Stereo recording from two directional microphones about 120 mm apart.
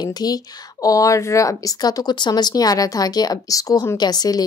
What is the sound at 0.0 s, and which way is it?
A woman's voice, 35° left (ahead or behind).